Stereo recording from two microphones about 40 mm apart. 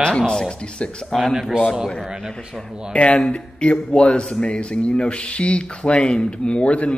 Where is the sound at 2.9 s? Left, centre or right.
Left.